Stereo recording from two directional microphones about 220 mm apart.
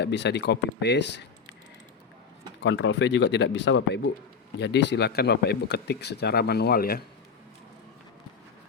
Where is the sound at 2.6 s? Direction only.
55° left (ahead or behind).